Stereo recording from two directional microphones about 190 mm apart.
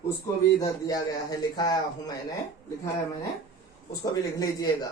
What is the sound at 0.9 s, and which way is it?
Speech, 20° left (ahead or behind).